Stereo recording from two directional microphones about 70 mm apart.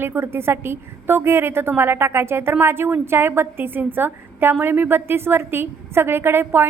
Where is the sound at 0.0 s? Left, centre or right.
Right.